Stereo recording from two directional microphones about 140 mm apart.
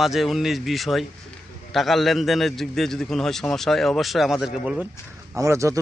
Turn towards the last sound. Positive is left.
turn(degrees=-20)  # may be behind; listen again after turning